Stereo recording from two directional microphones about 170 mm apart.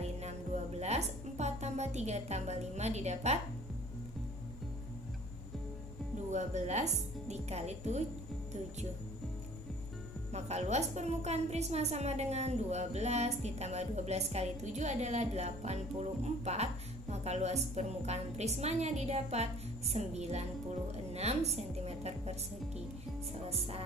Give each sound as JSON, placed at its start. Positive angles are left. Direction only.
{"t": 0.0, "sound": "music", "side_deg": -40}
{"t": 6.3, "sound": "a woman's voice", "side_deg": -45}
{"t": 10.3, "sound": "a woman's voice", "side_deg": -40}
{"t": 21.1, "sound": "music", "side_deg": -40}
{"t": 23.5, "sound": "a woman's voice", "side_deg": -35}